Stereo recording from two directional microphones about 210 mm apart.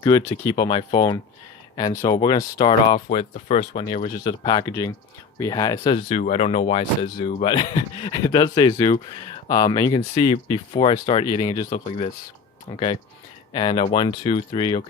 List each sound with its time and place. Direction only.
0.0 s speech: 15° left (ahead or behind); by 3.8 s 35° left (ahead or behind)
4.2 s speech: 20° left (ahead or behind)
6.1 s speech: 35° left (ahead or behind)